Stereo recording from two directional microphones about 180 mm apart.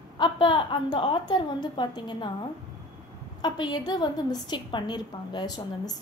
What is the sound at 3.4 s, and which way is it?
A woman's voice, 25° left (ahead or behind).